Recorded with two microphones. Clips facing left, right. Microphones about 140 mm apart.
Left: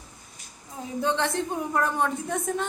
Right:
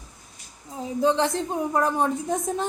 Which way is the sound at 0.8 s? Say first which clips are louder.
Right 5 dB; 35° right (ahead or behind).